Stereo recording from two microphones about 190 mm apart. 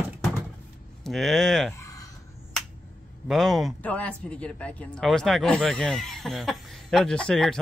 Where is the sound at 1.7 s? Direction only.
15° left (ahead or behind).